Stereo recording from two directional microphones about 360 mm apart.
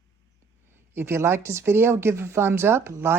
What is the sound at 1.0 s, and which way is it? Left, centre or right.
Speech, centre.